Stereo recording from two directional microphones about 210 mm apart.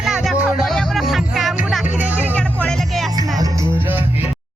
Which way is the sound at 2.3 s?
5° left (ahead or behind).